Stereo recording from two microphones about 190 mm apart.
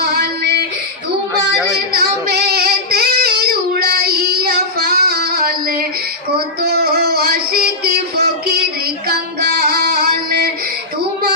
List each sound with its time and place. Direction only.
0.0 s child singing: 55° right (ahead or behind)
2.0 s child singing: 55° right (ahead or behind)
6.6 s music: 55° right (ahead or behind)